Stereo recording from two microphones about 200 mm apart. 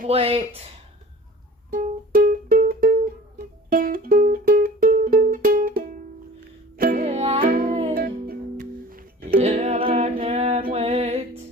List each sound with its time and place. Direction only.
0.1 s speech: 30° right (ahead or behind)
1.7 s music: 45° right (ahead or behind)
7.9 s music: 45° right (ahead or behind); by 11.2 s 30° right (ahead or behind)